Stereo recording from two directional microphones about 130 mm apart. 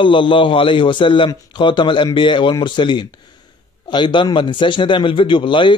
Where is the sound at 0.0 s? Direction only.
40° left (ahead or behind).